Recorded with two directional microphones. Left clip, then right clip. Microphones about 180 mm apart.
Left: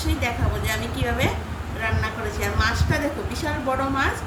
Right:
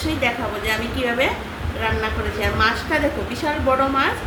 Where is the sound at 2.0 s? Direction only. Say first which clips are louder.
Right 4 dB; 15° left (ahead or behind).